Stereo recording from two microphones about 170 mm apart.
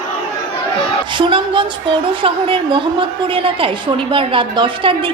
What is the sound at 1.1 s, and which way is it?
A woman's voice, 30° right (ahead or behind).